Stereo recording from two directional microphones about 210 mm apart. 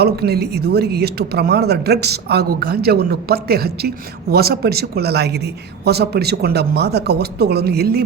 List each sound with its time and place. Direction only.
0.0 s speech: 50° right (ahead or behind)